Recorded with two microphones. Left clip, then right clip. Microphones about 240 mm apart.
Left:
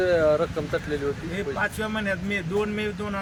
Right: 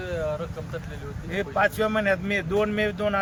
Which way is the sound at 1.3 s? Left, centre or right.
Centre.